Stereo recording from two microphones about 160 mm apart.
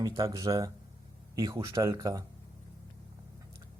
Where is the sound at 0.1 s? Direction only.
25° right (ahead or behind).